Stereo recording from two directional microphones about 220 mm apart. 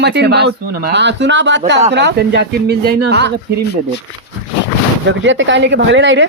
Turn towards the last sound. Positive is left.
turn(degrees=-55)  # may be behind; listen again after turning